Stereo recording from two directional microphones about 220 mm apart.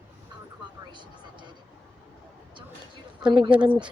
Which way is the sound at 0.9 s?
20° right (ahead or behind).